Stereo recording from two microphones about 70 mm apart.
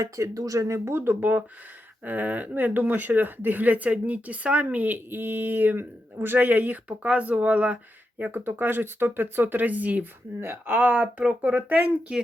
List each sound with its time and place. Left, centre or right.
0.0 s speech: right; by 12.1 s centre